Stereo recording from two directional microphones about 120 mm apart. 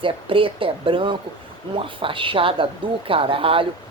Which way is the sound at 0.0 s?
45° right (ahead or behind).